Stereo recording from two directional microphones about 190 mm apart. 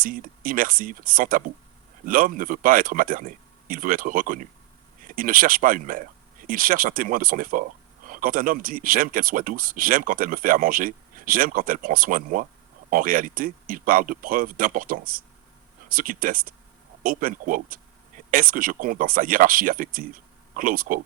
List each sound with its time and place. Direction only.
0.0 s speech: 45° right (ahead or behind)